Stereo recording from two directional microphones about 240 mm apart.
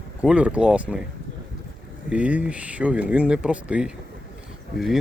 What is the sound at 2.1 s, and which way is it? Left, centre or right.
Speech, centre.